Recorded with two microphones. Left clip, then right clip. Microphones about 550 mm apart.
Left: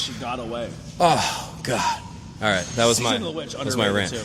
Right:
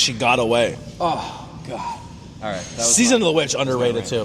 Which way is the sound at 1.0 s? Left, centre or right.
Left.